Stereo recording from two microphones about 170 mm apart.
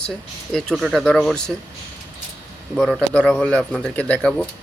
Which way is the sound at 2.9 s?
5° left (ahead or behind).